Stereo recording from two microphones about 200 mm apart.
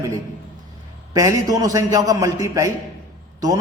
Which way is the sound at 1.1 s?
20° right (ahead or behind).